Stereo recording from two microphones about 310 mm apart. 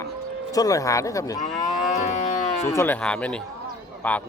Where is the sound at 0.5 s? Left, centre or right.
Centre.